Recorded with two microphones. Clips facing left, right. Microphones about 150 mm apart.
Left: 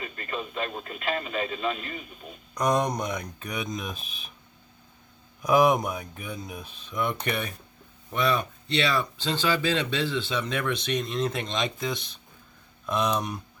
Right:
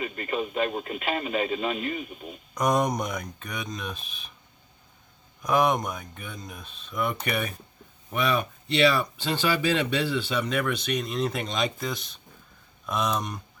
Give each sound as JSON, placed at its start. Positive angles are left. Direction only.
{"t": 0.0, "sound": "radio", "side_deg": -20}
{"t": 0.9, "sound": "speech", "side_deg": -20}
{"t": 2.6, "sound": "speech", "side_deg": -5}
{"t": 5.4, "sound": "speech", "side_deg": 5}